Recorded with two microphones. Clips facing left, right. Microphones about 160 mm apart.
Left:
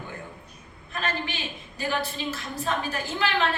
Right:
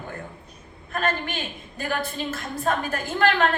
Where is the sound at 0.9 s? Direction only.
50° right (ahead or behind).